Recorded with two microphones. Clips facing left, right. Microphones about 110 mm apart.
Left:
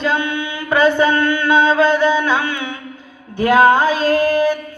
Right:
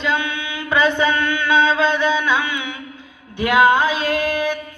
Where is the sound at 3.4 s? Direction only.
40° left (ahead or behind).